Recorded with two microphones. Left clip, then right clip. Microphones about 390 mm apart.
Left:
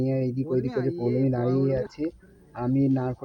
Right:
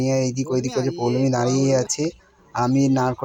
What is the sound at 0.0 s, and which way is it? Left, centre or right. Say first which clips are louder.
A man's voice: right 6 dB; left.